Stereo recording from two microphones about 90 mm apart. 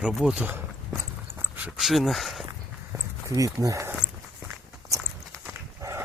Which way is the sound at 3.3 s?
40° right (ahead or behind).